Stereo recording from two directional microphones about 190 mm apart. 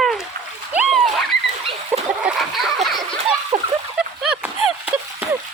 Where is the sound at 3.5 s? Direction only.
40° right (ahead or behind).